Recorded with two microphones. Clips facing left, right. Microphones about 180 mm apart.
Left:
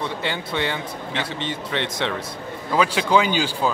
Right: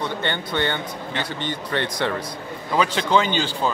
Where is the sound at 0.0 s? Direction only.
5° left (ahead or behind).